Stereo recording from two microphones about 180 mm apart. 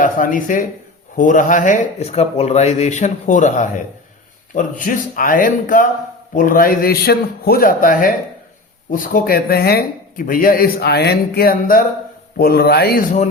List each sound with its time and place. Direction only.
0.0 s speech: 45° left (ahead or behind)